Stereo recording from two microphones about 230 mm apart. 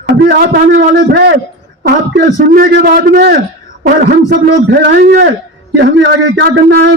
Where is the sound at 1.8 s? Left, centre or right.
Right.